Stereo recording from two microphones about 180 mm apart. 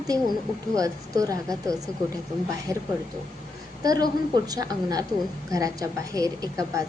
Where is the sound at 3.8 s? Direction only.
20° right (ahead or behind).